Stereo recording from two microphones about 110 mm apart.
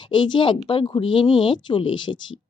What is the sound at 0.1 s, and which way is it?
Speech, 45° left (ahead or behind).